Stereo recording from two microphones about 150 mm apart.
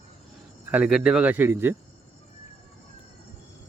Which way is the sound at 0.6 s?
5° right (ahead or behind).